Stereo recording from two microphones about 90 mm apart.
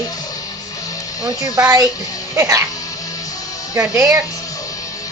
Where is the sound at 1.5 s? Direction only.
40° right (ahead or behind).